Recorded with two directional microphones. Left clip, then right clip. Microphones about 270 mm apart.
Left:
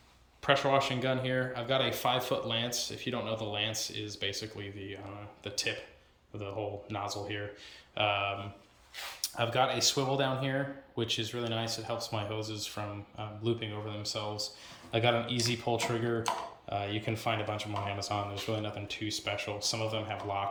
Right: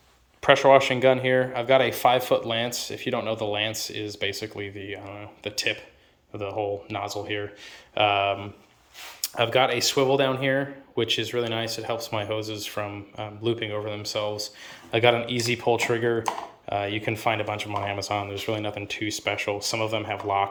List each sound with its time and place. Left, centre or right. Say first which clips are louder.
0.4 s speech: right 10 dB; centre